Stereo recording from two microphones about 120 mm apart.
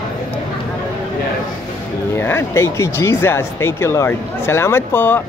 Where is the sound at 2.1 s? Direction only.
20° left (ahead or behind).